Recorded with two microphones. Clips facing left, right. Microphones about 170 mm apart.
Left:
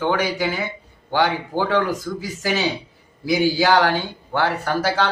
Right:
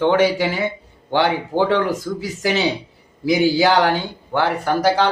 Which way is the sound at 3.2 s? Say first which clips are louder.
Right 3 dB; 20° right (ahead or behind).